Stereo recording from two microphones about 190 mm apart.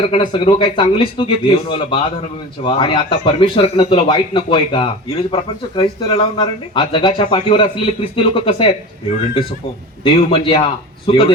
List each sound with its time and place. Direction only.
0.0 s speech: 25° left (ahead or behind)
10.0 s speech: 30° left (ahead or behind)